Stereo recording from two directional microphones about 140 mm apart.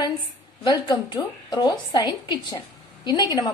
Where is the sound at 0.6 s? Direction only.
30° left (ahead or behind).